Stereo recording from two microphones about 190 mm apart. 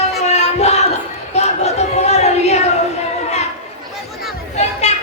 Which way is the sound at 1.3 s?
35° left (ahead or behind).